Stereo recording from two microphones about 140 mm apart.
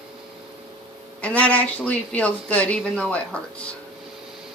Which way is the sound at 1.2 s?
10° left (ahead or behind).